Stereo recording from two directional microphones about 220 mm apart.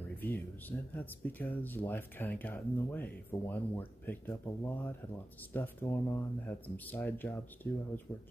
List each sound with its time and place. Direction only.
0.2 s speech: 10° left (ahead or behind)